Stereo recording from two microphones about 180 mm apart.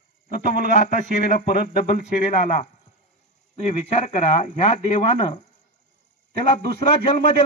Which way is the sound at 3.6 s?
40° left (ahead or behind).